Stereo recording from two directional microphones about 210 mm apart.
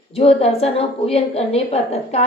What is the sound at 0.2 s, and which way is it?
A woman's voice, 30° left (ahead or behind).